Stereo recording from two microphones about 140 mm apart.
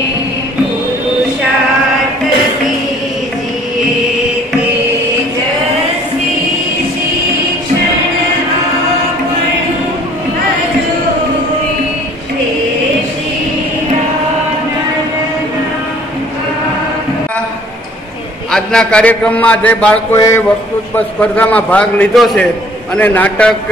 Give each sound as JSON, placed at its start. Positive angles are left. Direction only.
{"t": 18.5, "sound": "a man's voice", "side_deg": 5}
{"t": 20.2, "sound": "a man's voice", "side_deg": 20}
{"t": 20.9, "sound": "a man's voice", "side_deg": 10}
{"t": 22.9, "sound": "a man's voice", "side_deg": 10}